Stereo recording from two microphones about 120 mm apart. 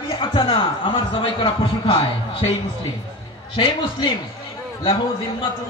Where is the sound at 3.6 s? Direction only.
40° left (ahead or behind).